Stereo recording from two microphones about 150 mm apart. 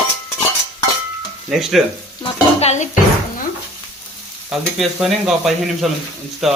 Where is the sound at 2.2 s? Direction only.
45° left (ahead or behind).